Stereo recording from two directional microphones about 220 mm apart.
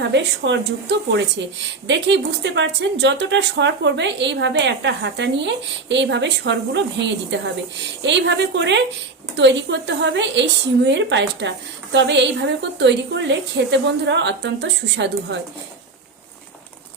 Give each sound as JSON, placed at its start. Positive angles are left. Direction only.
{"t": 0.1, "sound": "speech", "side_deg": -55}